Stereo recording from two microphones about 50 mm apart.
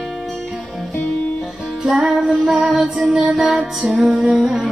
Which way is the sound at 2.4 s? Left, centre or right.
Centre.